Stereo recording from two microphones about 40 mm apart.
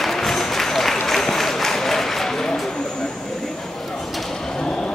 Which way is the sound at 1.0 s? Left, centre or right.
Centre.